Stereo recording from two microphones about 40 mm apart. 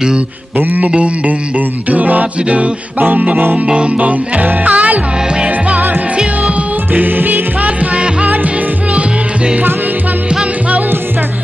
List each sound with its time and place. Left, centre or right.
0.6 s speech: right
0.9 s music: right
3.0 s speech: right
3.6 s music: right
6.9 s music: right
7.6 s music: right